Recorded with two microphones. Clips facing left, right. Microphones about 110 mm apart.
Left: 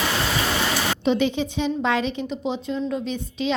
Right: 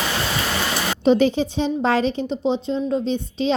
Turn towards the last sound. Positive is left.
turn(degrees=-30)  # may be behind; listen again after turning